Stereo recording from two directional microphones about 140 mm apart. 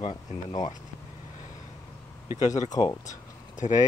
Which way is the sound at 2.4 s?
60° left (ahead or behind).